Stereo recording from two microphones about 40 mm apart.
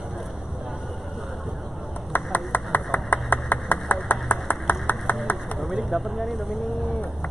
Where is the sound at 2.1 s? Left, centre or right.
Left.